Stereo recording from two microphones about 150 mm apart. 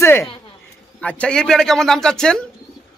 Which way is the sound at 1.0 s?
5° left (ahead or behind).